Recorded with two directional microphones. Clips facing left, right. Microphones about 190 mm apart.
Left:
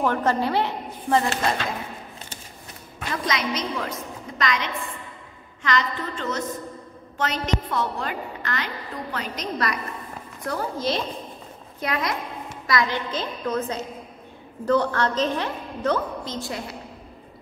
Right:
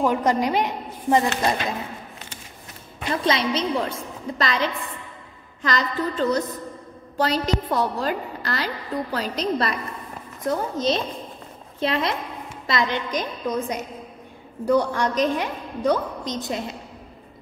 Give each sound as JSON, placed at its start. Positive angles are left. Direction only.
{"t": 0.0, "sound": "a woman's voice", "side_deg": -15}
{"t": 3.1, "sound": "a woman's voice", "side_deg": -30}
{"t": 10.4, "sound": "a woman's voice", "side_deg": -20}